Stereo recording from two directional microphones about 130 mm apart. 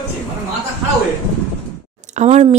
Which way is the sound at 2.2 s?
60° right (ahead or behind).